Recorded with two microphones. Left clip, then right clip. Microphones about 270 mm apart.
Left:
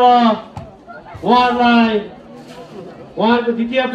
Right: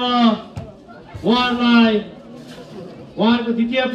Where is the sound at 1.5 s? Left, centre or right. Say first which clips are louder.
Left 3 dB; centre.